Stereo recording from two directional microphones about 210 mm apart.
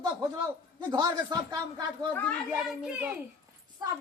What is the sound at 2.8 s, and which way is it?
Speech, 5° right (ahead or behind).